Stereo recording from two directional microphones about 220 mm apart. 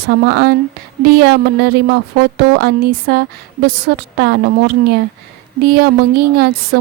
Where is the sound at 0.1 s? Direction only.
45° right (ahead or behind).